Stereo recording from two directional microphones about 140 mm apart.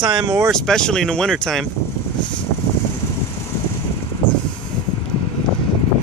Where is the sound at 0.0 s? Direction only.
30° right (ahead or behind).